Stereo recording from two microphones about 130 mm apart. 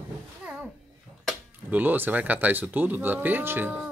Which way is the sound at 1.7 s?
15° right (ahead or behind).